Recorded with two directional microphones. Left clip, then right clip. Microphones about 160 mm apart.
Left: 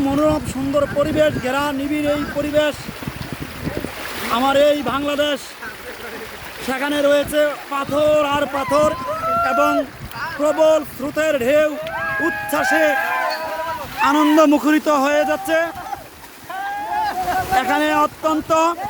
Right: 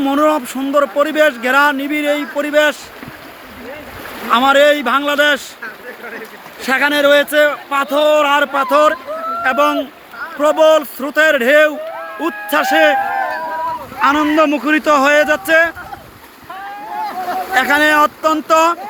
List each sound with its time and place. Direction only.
0.0 s speech: centre (ahead or behind)
4.3 s speech: 5° left (ahead or behind)
6.7 s speech: 10° left (ahead or behind)
14.0 s speech: 20° left (ahead or behind)
14.8 s speech: 10° left (ahead or behind)
17.1 s speech: 5° left (ahead or behind)